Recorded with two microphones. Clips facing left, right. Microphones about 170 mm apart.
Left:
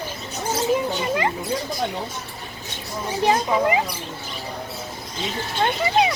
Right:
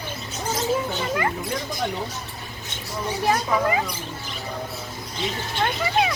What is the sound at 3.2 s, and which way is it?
Speech, 20° left (ahead or behind).